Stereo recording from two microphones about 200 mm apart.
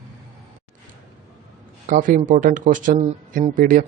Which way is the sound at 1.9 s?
45° right (ahead or behind).